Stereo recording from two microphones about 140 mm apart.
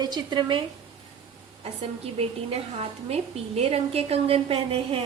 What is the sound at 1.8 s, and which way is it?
A woman's voice, 50° right (ahead or behind).